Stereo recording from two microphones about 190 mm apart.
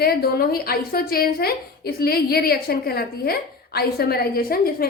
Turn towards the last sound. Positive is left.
turn(degrees=50)  # may be behind; listen again after turning